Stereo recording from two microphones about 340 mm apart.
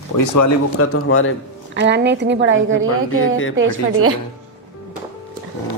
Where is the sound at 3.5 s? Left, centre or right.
Right.